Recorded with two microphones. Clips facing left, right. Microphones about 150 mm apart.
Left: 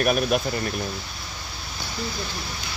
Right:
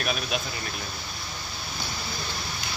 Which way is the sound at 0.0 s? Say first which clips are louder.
Left 8 dB; 50° left (ahead or behind).